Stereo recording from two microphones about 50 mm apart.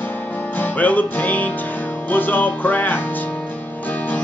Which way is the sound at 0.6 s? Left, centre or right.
Left.